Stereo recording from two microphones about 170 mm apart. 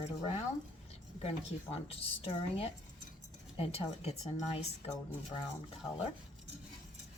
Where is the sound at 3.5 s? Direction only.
35° left (ahead or behind).